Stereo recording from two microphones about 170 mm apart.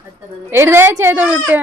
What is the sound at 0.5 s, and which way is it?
Speech, 15° right (ahead or behind).